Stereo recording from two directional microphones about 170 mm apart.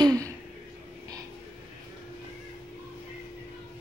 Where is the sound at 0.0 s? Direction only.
20° right (ahead or behind).